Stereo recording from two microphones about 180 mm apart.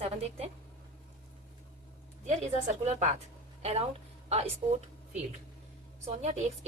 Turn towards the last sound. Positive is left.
turn(degrees=-40)  # may be behind; listen again after turning